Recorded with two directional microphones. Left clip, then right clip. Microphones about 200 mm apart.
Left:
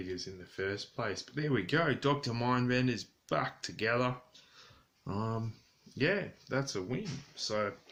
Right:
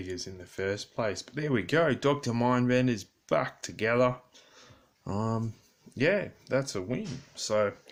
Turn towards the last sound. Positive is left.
turn(degrees=-45)  # may be behind; listen again after turning